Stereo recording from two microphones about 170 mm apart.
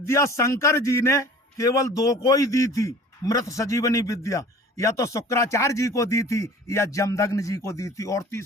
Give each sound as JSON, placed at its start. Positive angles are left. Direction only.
{"t": 0.0, "sound": "a man's voice", "side_deg": 15}